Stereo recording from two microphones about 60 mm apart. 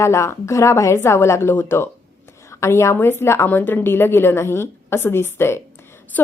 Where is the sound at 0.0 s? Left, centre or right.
Left.